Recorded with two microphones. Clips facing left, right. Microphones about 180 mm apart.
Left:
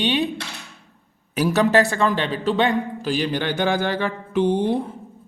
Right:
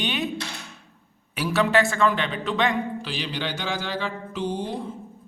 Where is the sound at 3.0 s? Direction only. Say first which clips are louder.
Left 7 dB; 50° left (ahead or behind).